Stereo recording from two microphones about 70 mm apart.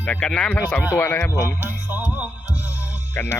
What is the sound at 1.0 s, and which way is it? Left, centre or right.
Speech, left.